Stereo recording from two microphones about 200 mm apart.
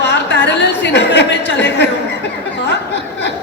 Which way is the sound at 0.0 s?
60° left (ahead or behind).